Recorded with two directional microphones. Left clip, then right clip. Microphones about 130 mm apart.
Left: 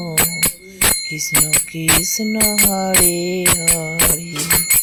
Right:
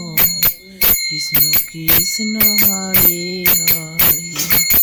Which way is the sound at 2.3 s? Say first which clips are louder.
Left 2 dB; 25° left (ahead or behind).